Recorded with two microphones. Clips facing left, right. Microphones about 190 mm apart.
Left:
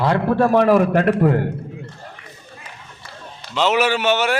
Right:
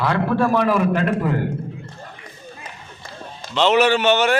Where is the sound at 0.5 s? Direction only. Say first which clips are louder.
Left 4 dB; 50° left (ahead or behind).